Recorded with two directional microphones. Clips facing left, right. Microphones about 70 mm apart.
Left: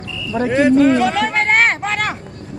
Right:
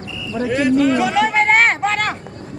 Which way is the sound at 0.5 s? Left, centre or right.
Left.